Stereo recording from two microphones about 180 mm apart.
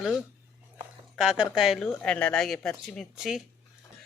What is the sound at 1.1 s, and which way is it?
A woman's voice, 5° right (ahead or behind).